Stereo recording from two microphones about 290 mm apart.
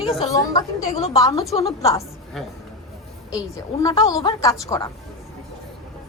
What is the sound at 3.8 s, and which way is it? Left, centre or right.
A woman's voice, centre.